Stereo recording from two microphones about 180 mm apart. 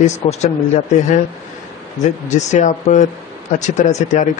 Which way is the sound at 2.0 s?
40° left (ahead or behind).